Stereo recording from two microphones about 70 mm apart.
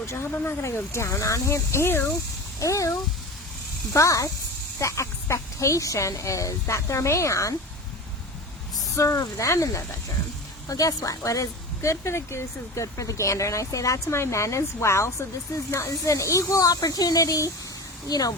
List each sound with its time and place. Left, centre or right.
0.1 s speech: left
2.6 s speech: left
9.0 s speech: left